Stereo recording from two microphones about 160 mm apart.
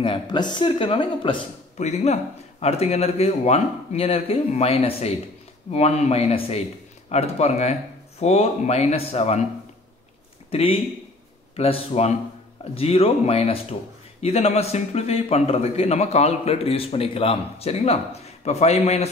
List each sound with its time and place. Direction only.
0.0 s a man's voice: 30° left (ahead or behind)
1.8 s a man's voice: 45° left (ahead or behind)
10.5 s a man's voice: 35° left (ahead or behind)